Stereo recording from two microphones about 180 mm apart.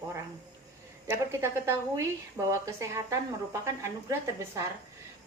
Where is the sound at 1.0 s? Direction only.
15° right (ahead or behind).